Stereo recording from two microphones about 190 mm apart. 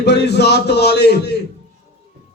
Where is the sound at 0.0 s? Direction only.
60° left (ahead or behind).